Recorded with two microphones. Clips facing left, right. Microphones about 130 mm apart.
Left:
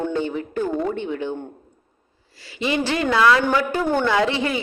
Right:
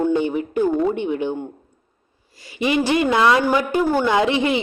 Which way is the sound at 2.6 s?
15° right (ahead or behind).